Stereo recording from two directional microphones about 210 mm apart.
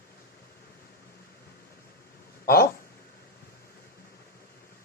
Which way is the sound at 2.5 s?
45° left (ahead or behind).